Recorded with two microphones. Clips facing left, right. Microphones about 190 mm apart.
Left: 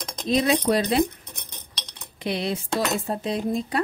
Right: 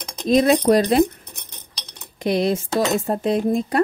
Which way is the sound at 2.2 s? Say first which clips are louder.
Right 7 dB; 45° right (ahead or behind).